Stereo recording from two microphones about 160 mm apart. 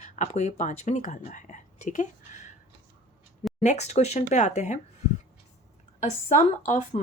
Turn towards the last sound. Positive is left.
turn(degrees=50)  # may be behind; listen again after turning